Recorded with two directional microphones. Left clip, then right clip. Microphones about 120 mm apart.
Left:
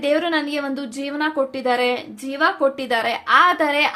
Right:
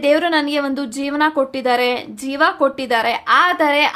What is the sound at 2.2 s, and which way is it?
Speech, 40° right (ahead or behind).